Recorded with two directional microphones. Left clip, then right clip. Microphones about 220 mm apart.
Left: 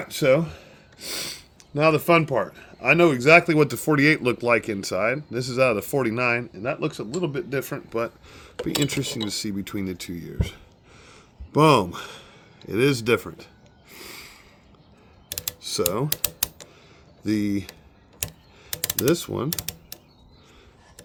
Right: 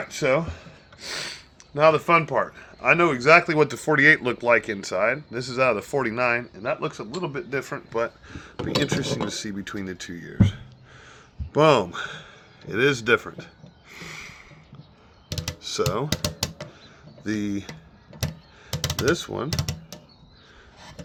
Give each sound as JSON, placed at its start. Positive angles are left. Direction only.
{"t": 0.0, "sound": "a man's voice", "side_deg": 55}
{"t": 13.9, "sound": "a sound", "side_deg": 50}
{"t": 15.6, "sound": "speech", "side_deg": 50}
{"t": 17.2, "sound": "speech", "side_deg": 50}
{"t": 19.1, "sound": "speech", "side_deg": 50}